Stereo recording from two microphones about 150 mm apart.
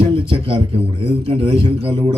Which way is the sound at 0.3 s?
35° right (ahead or behind).